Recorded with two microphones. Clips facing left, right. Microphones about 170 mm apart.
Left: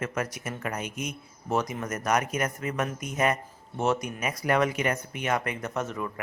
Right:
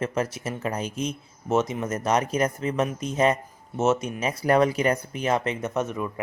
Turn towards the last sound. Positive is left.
turn(degrees=-20)  # may be behind; listen again after turning